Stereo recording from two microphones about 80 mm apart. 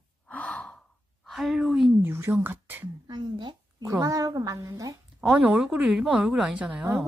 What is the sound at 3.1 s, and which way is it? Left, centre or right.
Speech, right.